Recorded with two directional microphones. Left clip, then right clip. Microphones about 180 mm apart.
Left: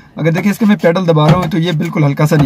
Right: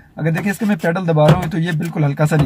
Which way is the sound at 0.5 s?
10° left (ahead or behind).